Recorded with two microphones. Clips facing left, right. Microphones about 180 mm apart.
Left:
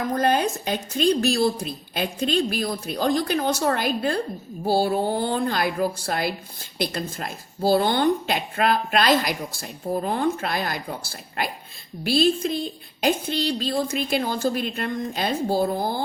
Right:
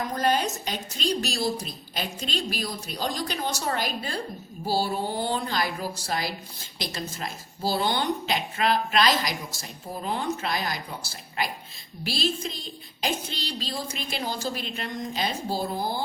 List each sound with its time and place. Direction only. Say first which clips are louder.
0.2 s a woman's voice: left 2 dB; 55° left (ahead or behind)